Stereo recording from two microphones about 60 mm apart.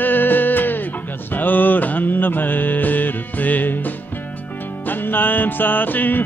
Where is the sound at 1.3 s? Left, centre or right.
Left.